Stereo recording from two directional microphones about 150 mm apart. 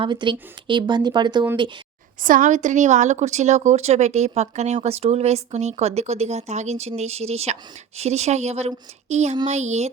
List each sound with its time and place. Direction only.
0.0 s speech: 30° right (ahead or behind)
2.2 s a woman's voice: 60° right (ahead or behind)